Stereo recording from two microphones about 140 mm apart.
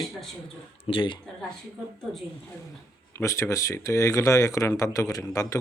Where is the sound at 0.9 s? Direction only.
40° left (ahead or behind).